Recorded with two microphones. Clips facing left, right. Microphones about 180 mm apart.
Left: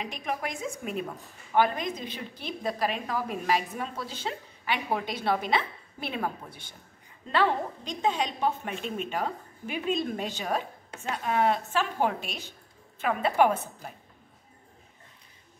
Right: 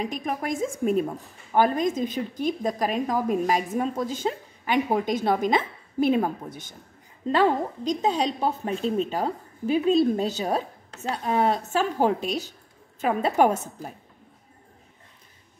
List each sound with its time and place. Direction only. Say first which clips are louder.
0.0 s a woman's voice: right 4 dB; 45° right (ahead or behind)